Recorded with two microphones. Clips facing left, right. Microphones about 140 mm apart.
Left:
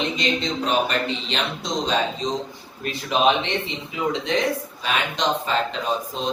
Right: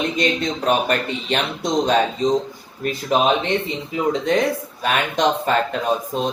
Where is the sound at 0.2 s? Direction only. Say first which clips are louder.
Right 3 dB; 50° right (ahead or behind).